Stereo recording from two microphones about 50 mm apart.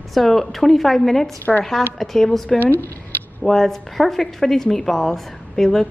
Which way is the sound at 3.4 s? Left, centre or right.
Centre.